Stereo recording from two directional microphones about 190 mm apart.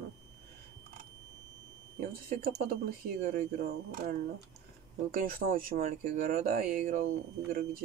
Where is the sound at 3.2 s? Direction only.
60° right (ahead or behind).